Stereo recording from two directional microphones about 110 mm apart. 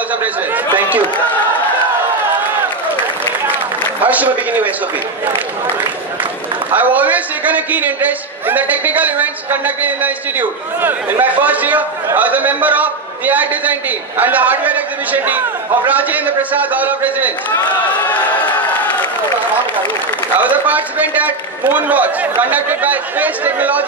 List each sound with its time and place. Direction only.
4.0 s a man's voice: 15° right (ahead or behind)
6.7 s a man's voice: 15° right (ahead or behind)
20.3 s a man's voice: 15° right (ahead or behind)